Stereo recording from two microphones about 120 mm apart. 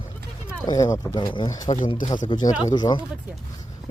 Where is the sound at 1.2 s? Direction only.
45° left (ahead or behind).